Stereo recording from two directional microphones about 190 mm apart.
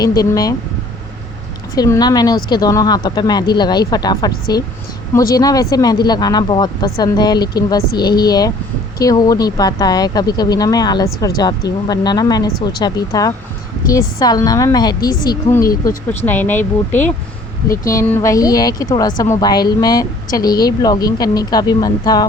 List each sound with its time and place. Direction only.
0.0 s a woman's voice: 20° left (ahead or behind)
1.7 s a woman's voice: 20° left (ahead or behind)